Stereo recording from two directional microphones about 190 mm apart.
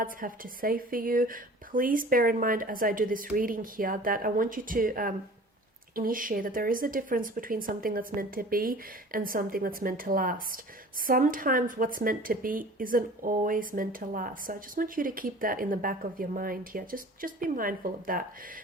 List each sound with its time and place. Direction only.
0.0 s speech: 45° right (ahead or behind)